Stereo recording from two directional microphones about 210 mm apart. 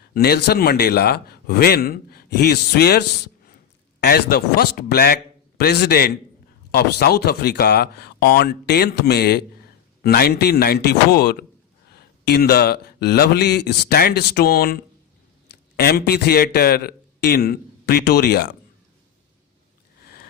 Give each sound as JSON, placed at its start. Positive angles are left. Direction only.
{"t": 0.1, "sound": "a man's voice", "side_deg": 50}
{"t": 4.0, "sound": "a man's voice", "side_deg": 45}